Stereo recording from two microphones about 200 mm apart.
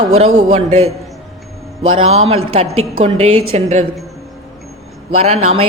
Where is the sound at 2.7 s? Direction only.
90° right.